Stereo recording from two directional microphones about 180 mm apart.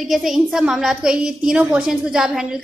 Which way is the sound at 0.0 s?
Centre (ahead or behind).